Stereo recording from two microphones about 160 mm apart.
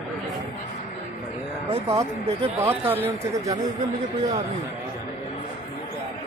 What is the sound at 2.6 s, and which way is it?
Speech, 15° right (ahead or behind).